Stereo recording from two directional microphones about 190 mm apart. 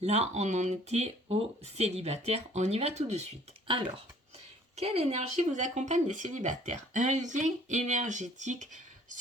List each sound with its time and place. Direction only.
0.0 s speech: 35° right (ahead or behind)